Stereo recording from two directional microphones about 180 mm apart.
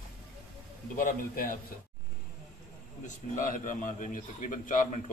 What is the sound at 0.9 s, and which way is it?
Speech, 50° left (ahead or behind).